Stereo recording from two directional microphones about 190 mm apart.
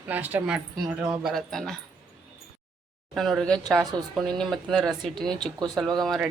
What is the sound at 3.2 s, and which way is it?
A woman's voice, centre (ahead or behind).